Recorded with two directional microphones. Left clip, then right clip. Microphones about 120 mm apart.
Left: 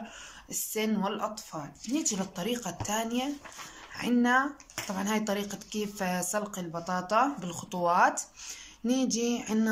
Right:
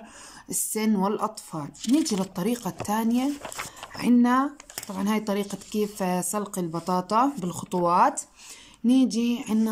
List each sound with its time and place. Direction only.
0.5 s speech: 50° right (ahead or behind); by 9.7 s 30° right (ahead or behind)